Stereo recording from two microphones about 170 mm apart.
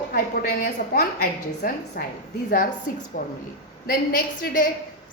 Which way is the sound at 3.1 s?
55° left (ahead or behind).